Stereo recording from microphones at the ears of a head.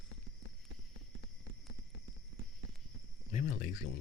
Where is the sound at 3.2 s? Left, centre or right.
Left.